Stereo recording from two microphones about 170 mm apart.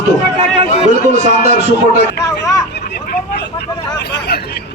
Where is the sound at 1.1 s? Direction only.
45° right (ahead or behind).